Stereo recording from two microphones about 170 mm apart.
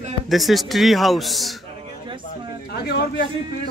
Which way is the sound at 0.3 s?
Centre (ahead or behind).